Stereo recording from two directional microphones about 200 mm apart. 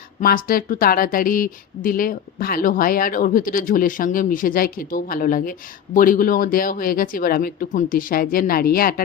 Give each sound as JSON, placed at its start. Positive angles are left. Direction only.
{"t": 0.2, "sound": "speech", "side_deg": 45}